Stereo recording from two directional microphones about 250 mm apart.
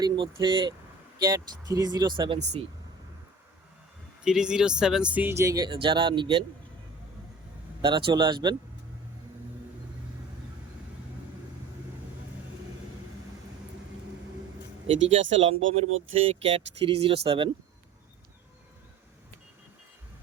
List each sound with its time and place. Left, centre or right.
0.0 s speech: centre
4.2 s speech: centre
7.8 s speech: centre
15.2 s speech: right
16.1 s speech: right